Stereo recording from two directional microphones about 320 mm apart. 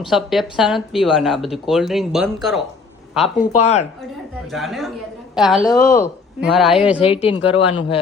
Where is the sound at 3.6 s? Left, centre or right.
Left.